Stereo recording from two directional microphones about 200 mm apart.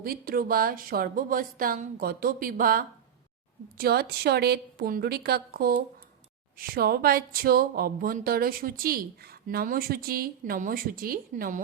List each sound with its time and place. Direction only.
0.0 s speech: 45° right (ahead or behind)